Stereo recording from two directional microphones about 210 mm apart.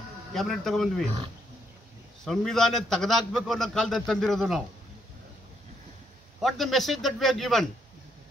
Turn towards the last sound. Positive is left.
turn(degrees=0)  # may be behind; listen again after turning